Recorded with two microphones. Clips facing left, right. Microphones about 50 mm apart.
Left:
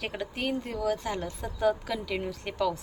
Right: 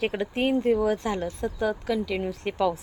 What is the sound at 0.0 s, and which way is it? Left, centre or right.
Speech, centre.